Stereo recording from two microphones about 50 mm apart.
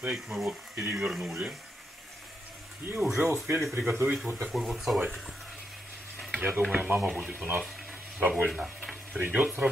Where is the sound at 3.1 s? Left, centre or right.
Right.